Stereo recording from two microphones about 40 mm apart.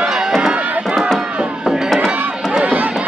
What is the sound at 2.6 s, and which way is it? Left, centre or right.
Run, right.